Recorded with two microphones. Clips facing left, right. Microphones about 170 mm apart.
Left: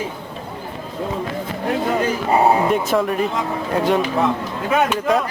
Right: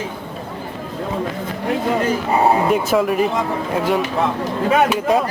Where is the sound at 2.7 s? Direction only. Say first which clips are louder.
Right 2 dB; centre (ahead or behind).